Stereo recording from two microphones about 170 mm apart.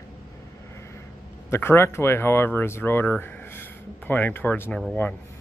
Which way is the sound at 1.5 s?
15° left (ahead or behind).